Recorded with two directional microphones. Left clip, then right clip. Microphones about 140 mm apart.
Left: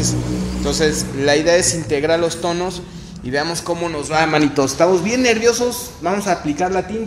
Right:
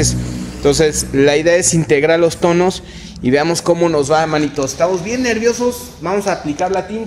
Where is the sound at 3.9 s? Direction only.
15° right (ahead or behind).